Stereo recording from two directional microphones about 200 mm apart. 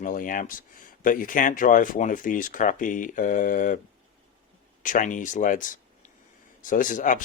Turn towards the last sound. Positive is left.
turn(degrees=40)  # may be behind; listen again after turning